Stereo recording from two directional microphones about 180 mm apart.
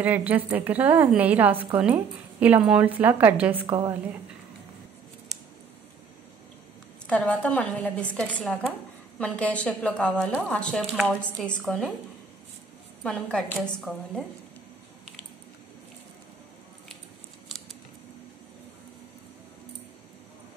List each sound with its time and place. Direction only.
0.0 s a woman's voice: 10° right (ahead or behind)
3.6 s a woman's voice: 30° right (ahead or behind)
7.1 s a woman's voice: 5° left (ahead or behind)
13.0 s a woman's voice: 5° left (ahead or behind)